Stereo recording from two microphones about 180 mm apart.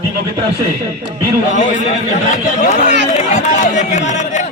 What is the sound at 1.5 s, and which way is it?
A man's voice, 45° left (ahead or behind).